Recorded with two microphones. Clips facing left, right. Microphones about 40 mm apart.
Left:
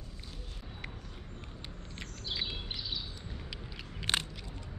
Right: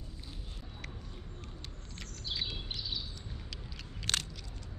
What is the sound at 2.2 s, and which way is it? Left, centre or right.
Bird, centre.